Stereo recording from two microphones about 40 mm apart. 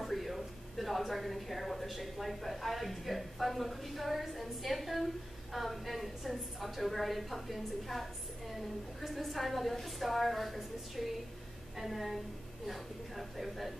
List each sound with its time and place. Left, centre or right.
0.0 s a woman's voice: centre